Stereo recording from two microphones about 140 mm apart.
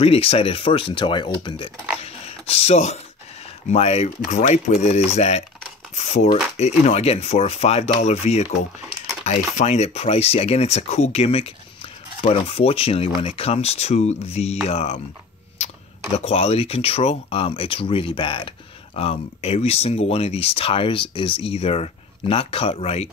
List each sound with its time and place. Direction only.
0.0 s speech: 45° left (ahead or behind)
2.0 s speech: 45° left (ahead or behind)
8.8 s crumpling: centre (ahead or behind)
9.2 s speech: 55° left (ahead or behind)
15.6 s tick-tock: 50° left (ahead or behind)
16.3 s speech: 45° left (ahead or behind)